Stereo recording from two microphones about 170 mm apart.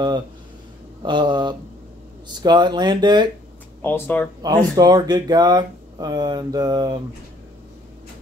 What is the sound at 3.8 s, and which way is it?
Speech, 10° left (ahead or behind).